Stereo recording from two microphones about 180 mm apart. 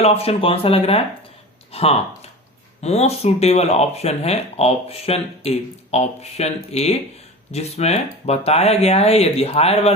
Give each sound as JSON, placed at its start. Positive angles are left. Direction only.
{"t": 0.0, "sound": "speech", "side_deg": 35}